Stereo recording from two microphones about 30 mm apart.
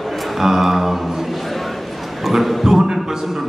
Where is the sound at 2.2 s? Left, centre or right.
Centre.